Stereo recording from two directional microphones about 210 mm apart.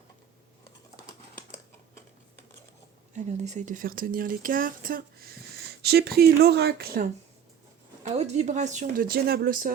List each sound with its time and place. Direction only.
3.2 s speech: 30° right (ahead or behind)
8.0 s a woman's voice: 30° right (ahead or behind)